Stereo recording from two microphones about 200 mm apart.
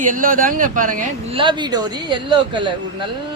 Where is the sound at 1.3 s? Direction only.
25° right (ahead or behind).